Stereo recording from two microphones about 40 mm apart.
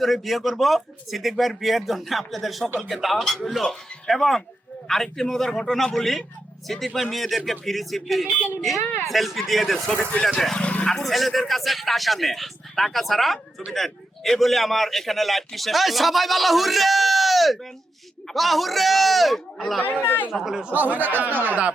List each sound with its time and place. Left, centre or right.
0.0 s a man's voice: centre
20.0 s speech: left
20.3 s speech: centre
20.7 s speech: right